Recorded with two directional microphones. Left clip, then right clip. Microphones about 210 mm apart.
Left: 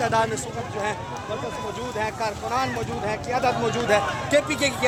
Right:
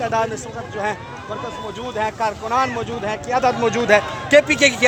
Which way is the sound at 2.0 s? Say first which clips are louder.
Right 7 dB; 35° right (ahead or behind).